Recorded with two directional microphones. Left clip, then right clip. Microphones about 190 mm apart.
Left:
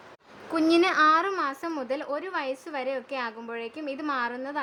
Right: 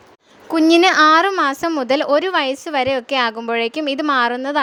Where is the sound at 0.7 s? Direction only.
40° right (ahead or behind).